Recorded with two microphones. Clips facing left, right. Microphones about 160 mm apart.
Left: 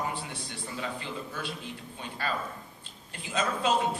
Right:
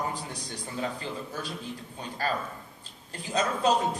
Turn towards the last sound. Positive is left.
turn(degrees=-40)  # may be behind; listen again after turning